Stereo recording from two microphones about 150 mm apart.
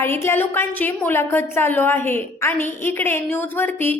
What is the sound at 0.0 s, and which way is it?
A woman's voice, 15° left (ahead or behind).